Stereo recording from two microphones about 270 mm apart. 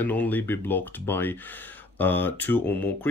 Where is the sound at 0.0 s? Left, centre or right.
Centre.